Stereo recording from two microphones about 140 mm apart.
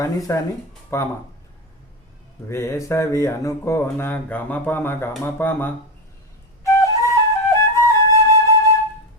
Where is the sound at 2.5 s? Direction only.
20° left (ahead or behind).